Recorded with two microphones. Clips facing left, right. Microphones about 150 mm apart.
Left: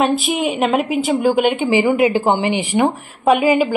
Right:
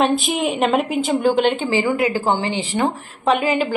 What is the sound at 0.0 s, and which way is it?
A woman's voice, centre (ahead or behind).